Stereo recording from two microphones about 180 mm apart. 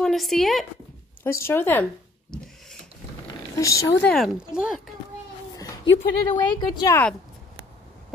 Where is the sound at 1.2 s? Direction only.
15° left (ahead or behind).